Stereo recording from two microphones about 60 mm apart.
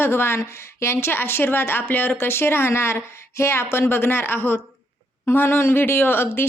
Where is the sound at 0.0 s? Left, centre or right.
Left.